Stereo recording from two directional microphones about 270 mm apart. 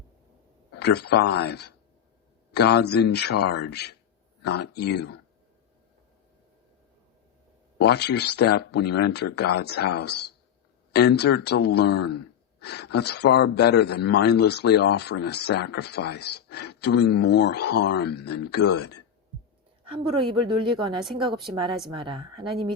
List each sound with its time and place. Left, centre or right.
0.8 s speech: left
7.8 s speech: left
19.8 s a woman's voice: centre